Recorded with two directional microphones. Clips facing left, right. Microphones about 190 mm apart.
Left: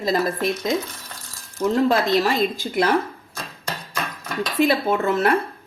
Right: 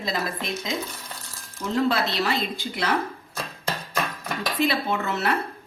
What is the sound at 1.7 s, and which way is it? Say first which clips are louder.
Speech: left 4 dB; 45° left (ahead or behind).